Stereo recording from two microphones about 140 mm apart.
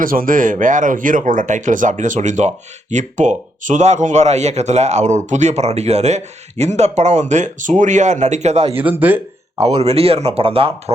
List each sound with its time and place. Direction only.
0.0 s a man's voice: 85° right; by 8.7 s 50° right (ahead or behind)
8.7 s speech: 10° right (ahead or behind)
9.7 s speech: 45° right (ahead or behind)